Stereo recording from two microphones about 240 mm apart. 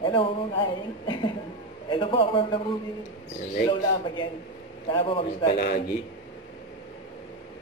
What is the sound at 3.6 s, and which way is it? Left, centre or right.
A man's voice, centre.